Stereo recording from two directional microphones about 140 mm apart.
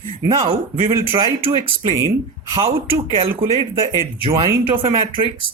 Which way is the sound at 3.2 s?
40° right (ahead or behind).